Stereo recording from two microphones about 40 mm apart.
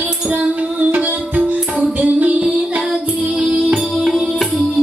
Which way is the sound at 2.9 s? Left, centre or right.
Right.